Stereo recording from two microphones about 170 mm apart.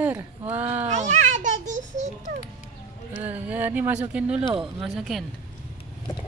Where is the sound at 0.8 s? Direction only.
45° right (ahead or behind).